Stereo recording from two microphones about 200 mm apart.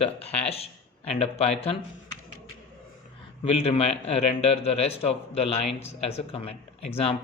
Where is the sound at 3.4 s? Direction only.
30° left (ahead or behind).